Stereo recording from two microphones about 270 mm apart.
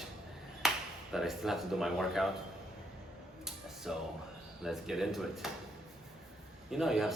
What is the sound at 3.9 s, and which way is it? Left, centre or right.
A man's voice, centre.